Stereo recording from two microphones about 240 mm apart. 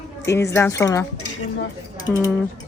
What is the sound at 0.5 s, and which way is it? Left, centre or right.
Speech, centre.